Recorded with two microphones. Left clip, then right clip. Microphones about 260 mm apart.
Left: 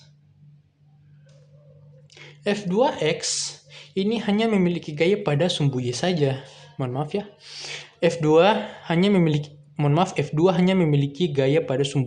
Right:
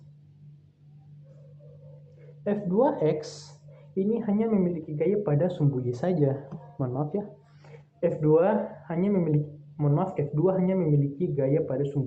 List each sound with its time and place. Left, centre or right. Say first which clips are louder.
2.4 s speech: left 3 dB; left